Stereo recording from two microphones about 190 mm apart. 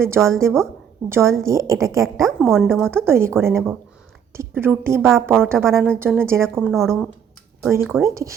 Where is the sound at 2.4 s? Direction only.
5° left (ahead or behind).